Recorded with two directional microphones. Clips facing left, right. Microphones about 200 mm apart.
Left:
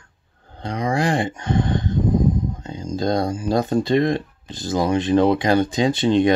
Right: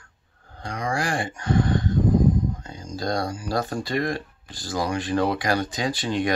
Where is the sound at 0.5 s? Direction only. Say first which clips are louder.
Left 5 dB; 20° left (ahead or behind).